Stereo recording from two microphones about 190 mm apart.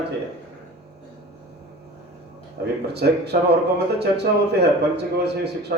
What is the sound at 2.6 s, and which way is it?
Speech, 55° right (ahead or behind).